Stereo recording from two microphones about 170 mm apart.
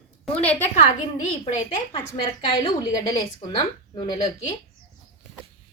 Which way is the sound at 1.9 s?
30° left (ahead or behind).